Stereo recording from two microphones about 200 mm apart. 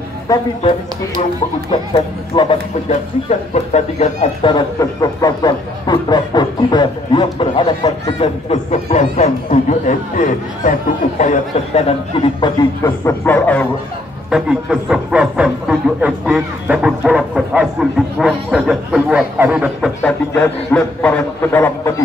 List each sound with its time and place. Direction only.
0.3 s speech: 15° left (ahead or behind)
2.3 s speech: 25° left (ahead or behind)
2.9 s speech: 35° left (ahead or behind)
8.5 s speech: 35° left (ahead or behind); by 13.7 s 10° left (ahead or behind)
14.3 s speech: centre (ahead or behind)
20.0 s speech: 5° left (ahead or behind)